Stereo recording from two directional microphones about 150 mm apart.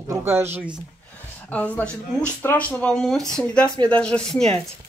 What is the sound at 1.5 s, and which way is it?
Speech, 10° left (ahead or behind).